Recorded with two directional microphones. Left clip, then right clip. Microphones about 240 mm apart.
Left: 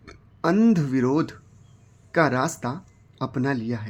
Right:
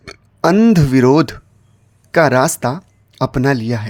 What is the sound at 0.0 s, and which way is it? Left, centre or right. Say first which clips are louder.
Speech: right 10 dB; right.